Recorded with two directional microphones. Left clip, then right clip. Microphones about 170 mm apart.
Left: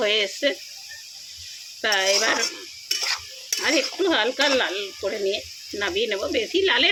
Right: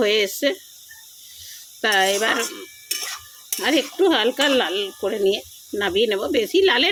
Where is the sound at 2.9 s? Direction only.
15° left (ahead or behind).